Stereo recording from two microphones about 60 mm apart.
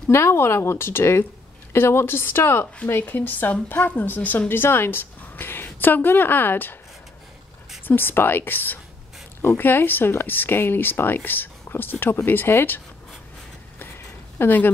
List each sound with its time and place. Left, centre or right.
0.1 s speech: left
7.8 s speech: left
14.4 s speech: left